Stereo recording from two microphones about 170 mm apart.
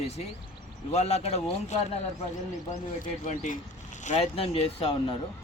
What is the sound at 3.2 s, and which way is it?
Speech, 45° left (ahead or behind).